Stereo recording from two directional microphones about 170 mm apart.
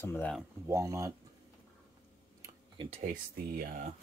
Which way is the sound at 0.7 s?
15° right (ahead or behind).